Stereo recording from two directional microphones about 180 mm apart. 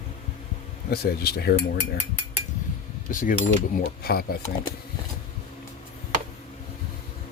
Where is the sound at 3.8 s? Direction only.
60° left (ahead or behind).